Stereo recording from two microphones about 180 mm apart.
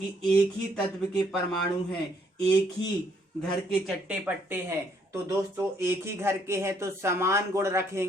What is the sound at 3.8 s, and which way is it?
Speech, 5° right (ahead or behind).